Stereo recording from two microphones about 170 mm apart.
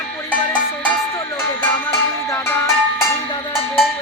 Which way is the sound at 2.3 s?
15° left (ahead or behind).